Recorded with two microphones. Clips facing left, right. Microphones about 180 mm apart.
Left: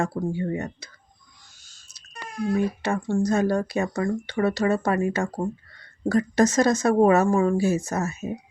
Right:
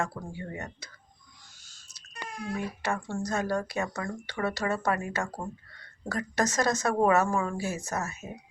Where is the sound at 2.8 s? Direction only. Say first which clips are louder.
Left 8 dB; 25° left (ahead or behind).